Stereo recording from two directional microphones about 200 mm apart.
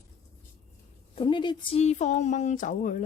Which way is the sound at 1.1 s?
25° left (ahead or behind).